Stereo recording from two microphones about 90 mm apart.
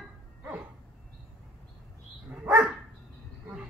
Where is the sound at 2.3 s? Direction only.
15° right (ahead or behind).